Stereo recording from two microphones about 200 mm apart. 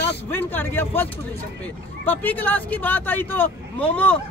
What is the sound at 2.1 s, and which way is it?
Speech, 10° left (ahead or behind).